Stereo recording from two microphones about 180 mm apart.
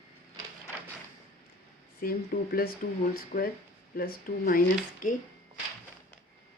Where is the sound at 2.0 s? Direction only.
55° left (ahead or behind).